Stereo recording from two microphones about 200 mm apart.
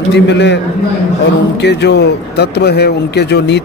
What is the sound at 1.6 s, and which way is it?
Speech, 60° left (ahead or behind).